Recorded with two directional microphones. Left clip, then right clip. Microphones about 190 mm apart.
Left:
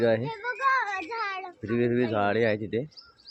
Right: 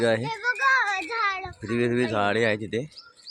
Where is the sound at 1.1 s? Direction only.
40° right (ahead or behind).